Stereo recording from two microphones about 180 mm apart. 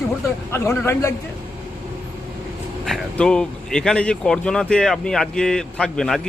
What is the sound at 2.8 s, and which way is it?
Speech, centre (ahead or behind).